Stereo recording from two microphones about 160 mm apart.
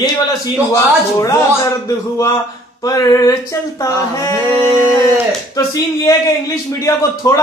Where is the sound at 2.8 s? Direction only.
20° left (ahead or behind).